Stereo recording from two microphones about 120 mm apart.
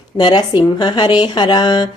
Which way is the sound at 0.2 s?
40° left (ahead or behind).